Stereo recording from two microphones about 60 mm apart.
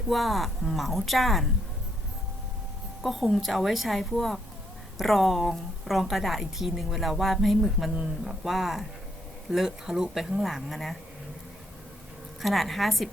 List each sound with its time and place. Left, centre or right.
0.1 s a woman's voice: centre
3.0 s a woman's voice: centre
12.4 s a woman's voice: centre